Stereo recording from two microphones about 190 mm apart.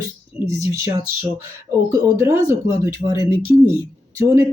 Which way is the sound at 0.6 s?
15° right (ahead or behind).